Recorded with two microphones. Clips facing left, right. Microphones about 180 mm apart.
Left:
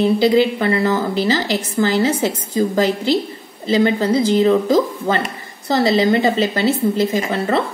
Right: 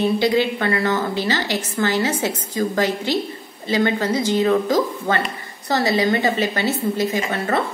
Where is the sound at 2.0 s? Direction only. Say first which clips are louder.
Left 4 dB; 30° left (ahead or behind).